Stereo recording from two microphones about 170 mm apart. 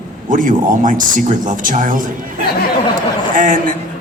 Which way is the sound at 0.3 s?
50° right (ahead or behind).